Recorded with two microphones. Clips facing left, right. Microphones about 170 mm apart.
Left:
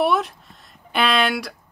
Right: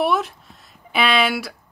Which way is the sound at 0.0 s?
Centre (ahead or behind).